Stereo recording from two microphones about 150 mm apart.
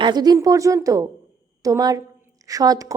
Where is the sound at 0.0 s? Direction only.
25° right (ahead or behind).